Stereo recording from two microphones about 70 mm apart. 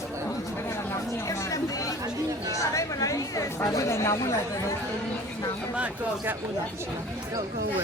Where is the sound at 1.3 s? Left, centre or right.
Left.